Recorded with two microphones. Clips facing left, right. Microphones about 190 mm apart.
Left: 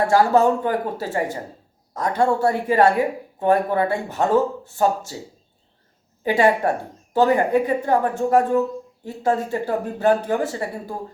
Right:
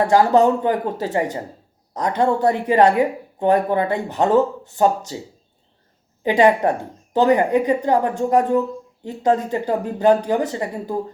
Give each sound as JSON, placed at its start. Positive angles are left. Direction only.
{"t": 0.1, "sound": "a woman's voice", "side_deg": -20}
{"t": 6.2, "sound": "a woman's voice", "side_deg": -20}